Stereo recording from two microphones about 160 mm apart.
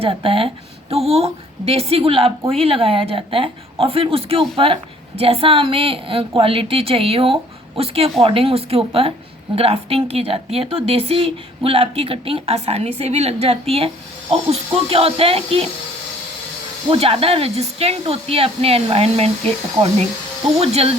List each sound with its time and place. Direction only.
0.0 s a woman's voice: 35° right (ahead or behind)
16.9 s a woman's voice: 35° right (ahead or behind)